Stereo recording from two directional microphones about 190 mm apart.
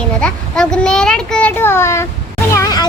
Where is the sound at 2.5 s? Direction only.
20° left (ahead or behind).